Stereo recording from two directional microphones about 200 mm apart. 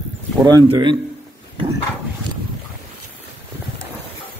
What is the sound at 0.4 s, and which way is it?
Speech, 20° right (ahead or behind).